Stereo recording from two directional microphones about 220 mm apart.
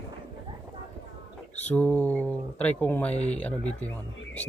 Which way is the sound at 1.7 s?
5° left (ahead or behind).